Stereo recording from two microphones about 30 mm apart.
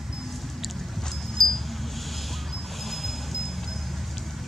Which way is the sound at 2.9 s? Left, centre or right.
Centre.